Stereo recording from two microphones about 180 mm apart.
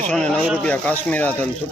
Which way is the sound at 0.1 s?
Centre (ahead or behind).